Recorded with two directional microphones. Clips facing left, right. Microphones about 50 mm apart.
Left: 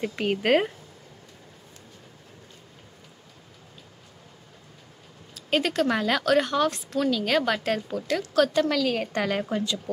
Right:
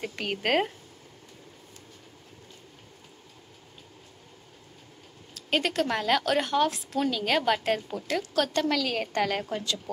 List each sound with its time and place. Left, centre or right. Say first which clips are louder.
0.0 s speech: left 5 dB; centre
5.3 s speech: left 2 dB; centre